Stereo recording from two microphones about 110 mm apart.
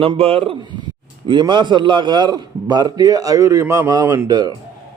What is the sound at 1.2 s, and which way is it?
A man's voice, 45° right (ahead or behind).